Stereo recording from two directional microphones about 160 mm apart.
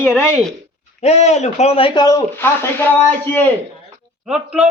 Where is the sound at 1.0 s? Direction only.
45° left (ahead or behind); by 2.2 s 25° left (ahead or behind).